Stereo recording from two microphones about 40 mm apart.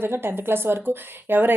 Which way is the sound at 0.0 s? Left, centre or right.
Right.